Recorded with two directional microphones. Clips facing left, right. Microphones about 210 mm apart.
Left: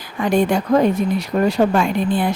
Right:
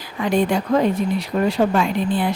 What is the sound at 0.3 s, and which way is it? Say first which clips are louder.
Speech: left 2 dB; 45° left (ahead or behind).